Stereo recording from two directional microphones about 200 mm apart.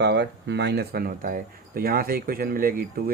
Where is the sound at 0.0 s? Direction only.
55° right (ahead or behind).